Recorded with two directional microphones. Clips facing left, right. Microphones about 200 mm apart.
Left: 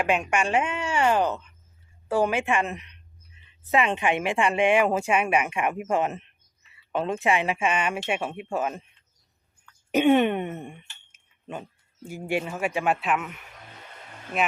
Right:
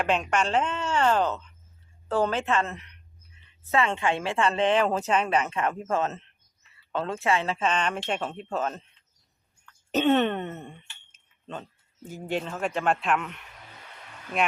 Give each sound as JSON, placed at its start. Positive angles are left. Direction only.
{"t": 0.0, "sound": "a woman's voice", "side_deg": 10}
{"t": 9.9, "sound": "a woman's voice", "side_deg": 10}